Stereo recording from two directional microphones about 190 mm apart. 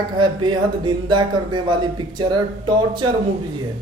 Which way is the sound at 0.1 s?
25° right (ahead or behind).